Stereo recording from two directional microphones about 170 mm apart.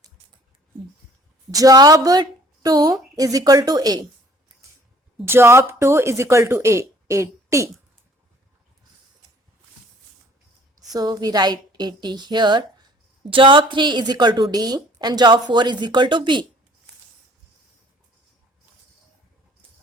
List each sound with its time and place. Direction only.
1.5 s a woman's voice: 20° right (ahead or behind)
5.2 s speech: 15° right (ahead or behind)
10.8 s a woman's voice: 20° right (ahead or behind)